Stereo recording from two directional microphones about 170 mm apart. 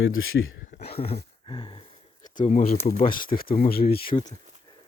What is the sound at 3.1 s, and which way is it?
Speech, 60° left (ahead or behind).